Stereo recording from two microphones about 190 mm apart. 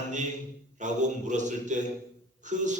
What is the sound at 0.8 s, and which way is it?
Speech, 40° right (ahead or behind).